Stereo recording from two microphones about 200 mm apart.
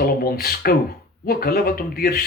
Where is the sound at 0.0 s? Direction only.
50° left (ahead or behind).